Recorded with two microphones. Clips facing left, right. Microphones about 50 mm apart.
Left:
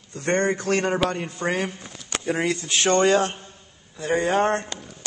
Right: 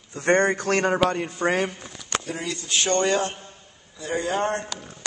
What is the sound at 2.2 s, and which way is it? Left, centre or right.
Speech, left.